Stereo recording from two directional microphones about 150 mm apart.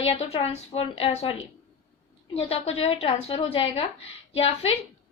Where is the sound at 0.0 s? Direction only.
40° left (ahead or behind).